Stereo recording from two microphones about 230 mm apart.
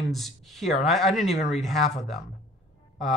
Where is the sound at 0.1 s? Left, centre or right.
Centre.